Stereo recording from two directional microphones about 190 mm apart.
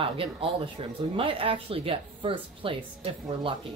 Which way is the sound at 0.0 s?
30° right (ahead or behind).